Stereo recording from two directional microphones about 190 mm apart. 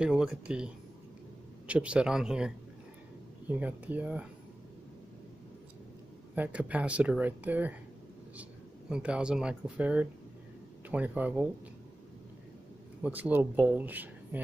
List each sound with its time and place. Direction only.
0.0 s speech: 5° right (ahead or behind)
1.7 s speech: 5° right (ahead or behind)
6.3 s speech: 10° right (ahead or behind)
13.0 s speech: 10° right (ahead or behind)